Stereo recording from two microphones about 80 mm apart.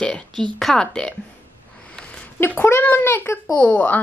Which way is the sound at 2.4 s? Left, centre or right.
Left.